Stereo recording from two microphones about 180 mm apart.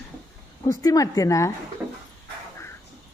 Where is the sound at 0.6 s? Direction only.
20° left (ahead or behind).